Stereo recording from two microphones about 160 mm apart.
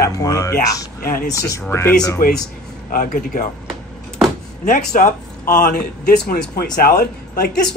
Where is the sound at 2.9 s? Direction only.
60° left (ahead or behind).